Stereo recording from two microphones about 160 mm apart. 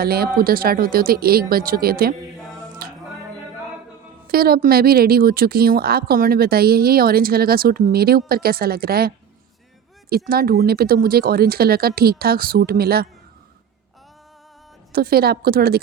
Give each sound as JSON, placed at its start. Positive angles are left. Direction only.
{"t": 0.0, "sound": "a woman's voice", "side_deg": -70}
{"t": 2.8, "sound": "music", "side_deg": -65}
{"t": 4.3, "sound": "a woman's voice", "side_deg": -70}
{"t": 14.9, "sound": "a woman's voice", "side_deg": -70}